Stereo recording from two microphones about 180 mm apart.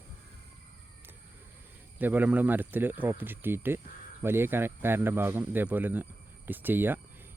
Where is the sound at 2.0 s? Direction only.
10° right (ahead or behind).